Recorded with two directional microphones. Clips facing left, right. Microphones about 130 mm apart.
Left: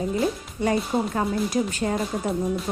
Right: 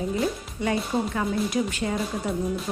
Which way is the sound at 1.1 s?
40° left (ahead or behind).